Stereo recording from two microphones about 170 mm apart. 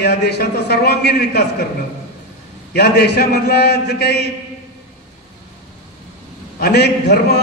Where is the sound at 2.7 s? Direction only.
75° left (ahead or behind).